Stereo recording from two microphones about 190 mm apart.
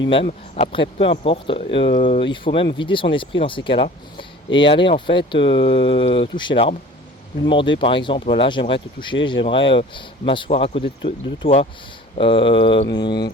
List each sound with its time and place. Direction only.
0.5 s speech: 30° left (ahead or behind)